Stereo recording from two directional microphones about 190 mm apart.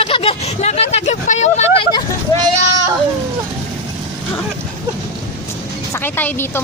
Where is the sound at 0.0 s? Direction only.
30° left (ahead or behind).